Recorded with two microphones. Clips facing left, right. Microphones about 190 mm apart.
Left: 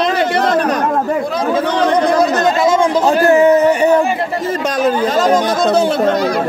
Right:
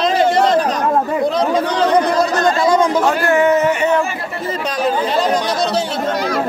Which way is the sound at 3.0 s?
30° left (ahead or behind).